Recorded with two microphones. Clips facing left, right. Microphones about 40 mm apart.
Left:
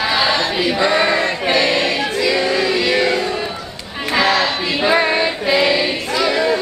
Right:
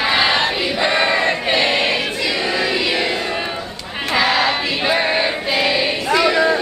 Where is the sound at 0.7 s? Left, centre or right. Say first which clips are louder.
Left 1 dB; centre.